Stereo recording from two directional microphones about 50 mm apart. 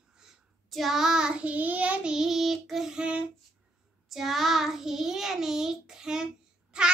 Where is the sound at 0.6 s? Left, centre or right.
Centre; by 1.9 s right.